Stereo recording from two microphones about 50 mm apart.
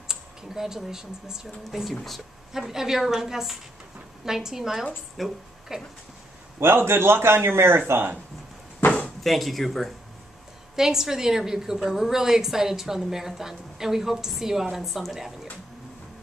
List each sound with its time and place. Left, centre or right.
0.1 s a woman's voice: centre
5.7 s a woman's voice: centre
6.6 s a man's voice: right
9.2 s speech: centre
10.8 s a woman's voice: centre